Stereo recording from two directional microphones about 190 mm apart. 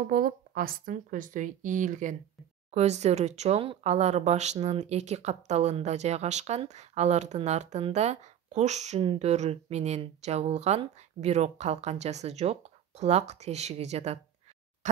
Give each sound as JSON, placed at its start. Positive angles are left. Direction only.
{"t": 0.0, "sound": "speech", "side_deg": -50}